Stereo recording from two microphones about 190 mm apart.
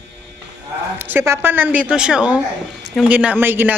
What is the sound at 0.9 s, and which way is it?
Speech, 10° right (ahead or behind).